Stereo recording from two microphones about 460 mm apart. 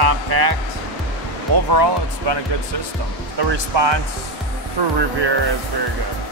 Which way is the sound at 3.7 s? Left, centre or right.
Right.